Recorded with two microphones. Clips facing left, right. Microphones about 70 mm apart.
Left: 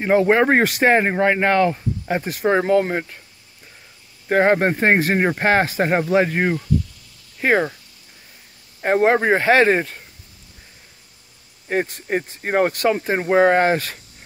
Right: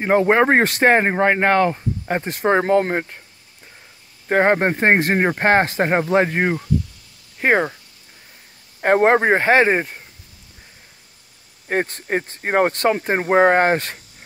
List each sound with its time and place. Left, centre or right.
0.0 s speech: right
4.3 s speech: right
6.1 s speech: right
8.8 s speech: right; by 10.0 s centre
11.7 s speech: right